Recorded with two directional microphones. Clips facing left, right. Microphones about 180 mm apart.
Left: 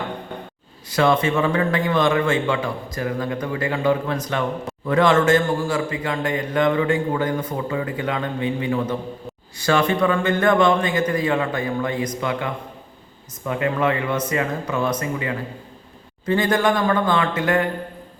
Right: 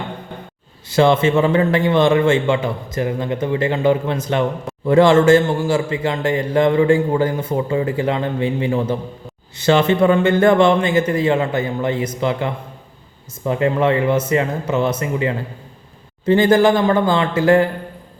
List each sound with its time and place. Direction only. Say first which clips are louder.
0.9 s a man's voice: right 4 dB; 25° right (ahead or behind)